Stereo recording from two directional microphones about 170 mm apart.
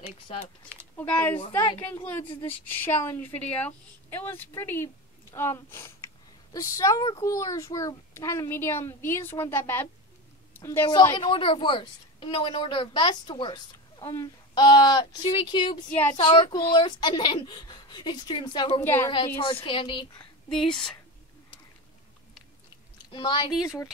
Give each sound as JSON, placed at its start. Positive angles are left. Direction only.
{"t": 0.9, "sound": "a woman's voice", "side_deg": 10}
{"t": 11.0, "sound": "a woman's voice", "side_deg": 25}
{"t": 18.8, "sound": "a woman's voice", "side_deg": 15}
{"t": 19.0, "sound": "a woman's voice", "side_deg": 30}
{"t": 20.4, "sound": "a woman's voice", "side_deg": 5}
{"t": 23.1, "sound": "a woman's voice", "side_deg": 25}